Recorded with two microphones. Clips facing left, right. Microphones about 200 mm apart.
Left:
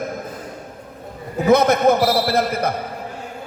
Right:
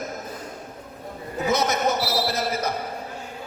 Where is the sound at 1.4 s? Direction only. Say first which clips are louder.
Left 9 dB; 55° left (ahead or behind).